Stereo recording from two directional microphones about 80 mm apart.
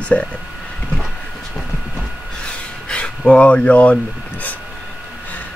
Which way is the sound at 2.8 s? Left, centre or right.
Centre.